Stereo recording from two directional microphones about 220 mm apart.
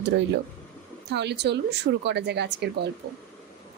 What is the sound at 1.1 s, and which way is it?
A woman's voice, 50° right (ahead or behind).